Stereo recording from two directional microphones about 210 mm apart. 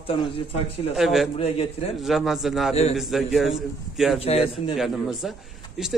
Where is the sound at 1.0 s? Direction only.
Centre (ahead or behind).